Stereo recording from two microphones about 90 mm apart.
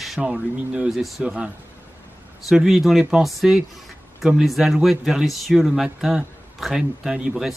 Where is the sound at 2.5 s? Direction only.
5° right (ahead or behind).